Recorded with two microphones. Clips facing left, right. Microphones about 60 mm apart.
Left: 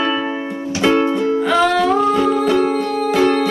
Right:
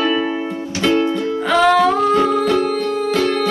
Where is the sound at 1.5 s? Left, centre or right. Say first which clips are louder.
Right 4 dB; centre.